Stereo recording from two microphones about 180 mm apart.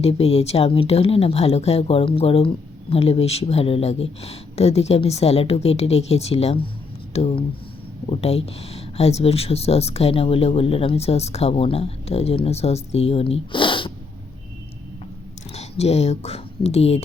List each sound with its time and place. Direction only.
0.0 s speech: 35° left (ahead or behind)
15.5 s speech: 35° left (ahead or behind)